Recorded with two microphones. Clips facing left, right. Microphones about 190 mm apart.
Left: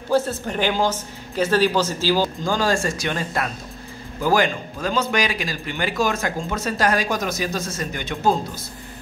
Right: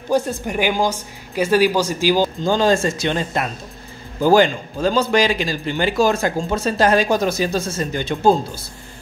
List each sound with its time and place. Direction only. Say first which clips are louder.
0.1 s a woman's voice: right 1 dB; 15° right (ahead or behind); by 8.4 s 30° right (ahead or behind)